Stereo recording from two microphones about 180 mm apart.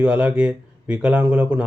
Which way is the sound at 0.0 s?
5° right (ahead or behind).